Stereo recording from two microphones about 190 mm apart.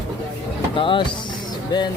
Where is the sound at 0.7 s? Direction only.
25° left (ahead or behind).